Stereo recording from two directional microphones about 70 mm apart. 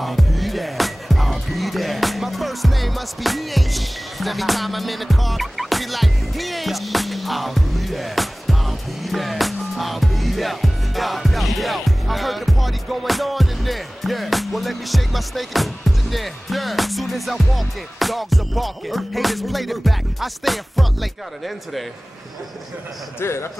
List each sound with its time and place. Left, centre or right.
0.0 s music: centre
23.2 s speech: left